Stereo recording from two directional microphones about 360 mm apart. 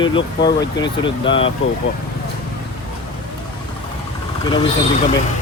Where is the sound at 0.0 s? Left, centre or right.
Centre.